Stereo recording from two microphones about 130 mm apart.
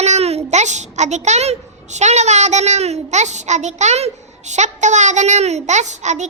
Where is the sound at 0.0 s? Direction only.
55° right (ahead or behind).